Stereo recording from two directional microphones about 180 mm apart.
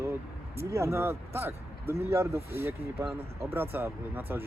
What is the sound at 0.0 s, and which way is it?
Vehicle, 15° right (ahead or behind).